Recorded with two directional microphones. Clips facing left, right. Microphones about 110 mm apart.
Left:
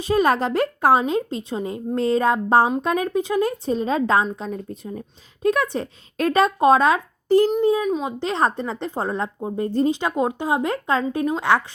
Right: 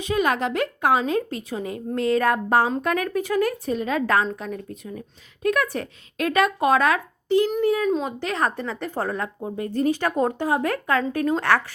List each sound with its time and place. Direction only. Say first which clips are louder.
0.0 s a woman's voice: left 3 dB; 35° left (ahead or behind)
1.0 s a woman's voice: left 1 dB; 25° left (ahead or behind)
7.3 s a child's voice: left 4 dB; 40° left (ahead or behind)
7.5 s a woman's voice: left 2 dB; 20° left (ahead or behind)